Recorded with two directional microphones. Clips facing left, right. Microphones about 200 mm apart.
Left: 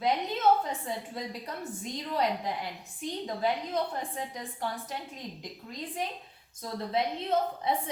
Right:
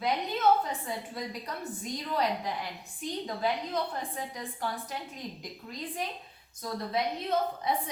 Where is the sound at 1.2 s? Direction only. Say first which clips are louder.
Even; 25° left (ahead or behind).